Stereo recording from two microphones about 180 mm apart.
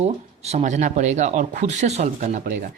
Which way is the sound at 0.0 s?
35° right (ahead or behind).